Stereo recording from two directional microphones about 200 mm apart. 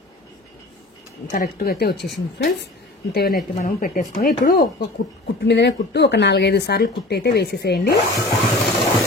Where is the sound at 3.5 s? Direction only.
45° left (ahead or behind).